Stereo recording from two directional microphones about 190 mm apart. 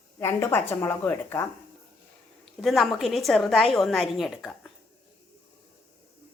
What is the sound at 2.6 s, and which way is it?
A woman's voice, centre (ahead or behind).